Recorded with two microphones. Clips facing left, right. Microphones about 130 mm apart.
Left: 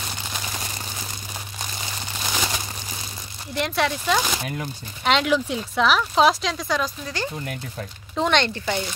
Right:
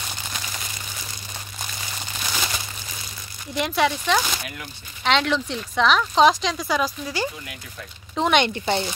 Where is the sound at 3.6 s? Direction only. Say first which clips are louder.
Right 2 dB; centre (ahead or behind).